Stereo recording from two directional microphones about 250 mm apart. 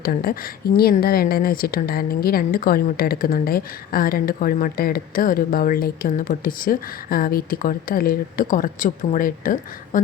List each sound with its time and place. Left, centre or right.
0.0 s a woman's voice: left